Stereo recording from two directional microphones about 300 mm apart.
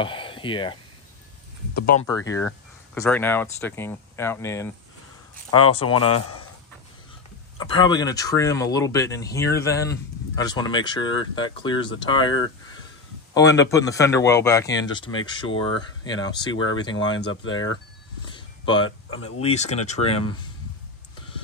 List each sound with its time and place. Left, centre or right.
0.0 s speech: centre
1.8 s speech: left
2.0 s speech: centre
5.9 s a man's voice: left
7.5 s speech: centre
17.2 s speech: left
17.5 s speech: centre
18.2 s a sound: centre
18.9 s speech: left
19.4 s speech: left